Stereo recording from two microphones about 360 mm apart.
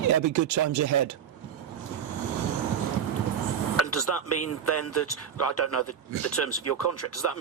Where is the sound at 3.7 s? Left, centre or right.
Left.